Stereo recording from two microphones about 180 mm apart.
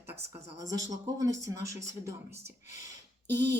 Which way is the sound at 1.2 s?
15° right (ahead or behind).